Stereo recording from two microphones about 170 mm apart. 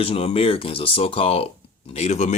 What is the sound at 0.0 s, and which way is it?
Speech, 35° left (ahead or behind).